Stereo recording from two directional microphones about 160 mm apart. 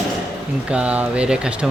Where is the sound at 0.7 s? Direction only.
5° right (ahead or behind).